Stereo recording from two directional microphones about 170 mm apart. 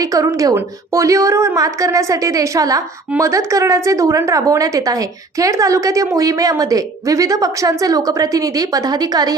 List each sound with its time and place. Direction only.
0.0 s a woman's voice: 20° right (ahead or behind)